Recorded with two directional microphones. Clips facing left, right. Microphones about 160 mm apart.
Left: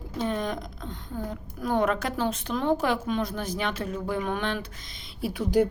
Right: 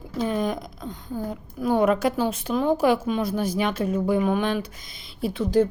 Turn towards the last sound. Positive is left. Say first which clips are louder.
# right 3 dB
turn(degrees=10)  # may be behind; listen again after turning